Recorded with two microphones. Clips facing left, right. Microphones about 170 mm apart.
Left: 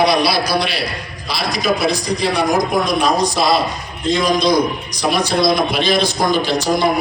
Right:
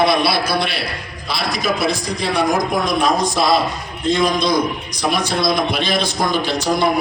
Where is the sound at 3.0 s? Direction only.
50° right (ahead or behind).